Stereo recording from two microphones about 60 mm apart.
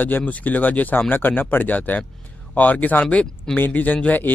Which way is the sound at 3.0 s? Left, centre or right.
Centre.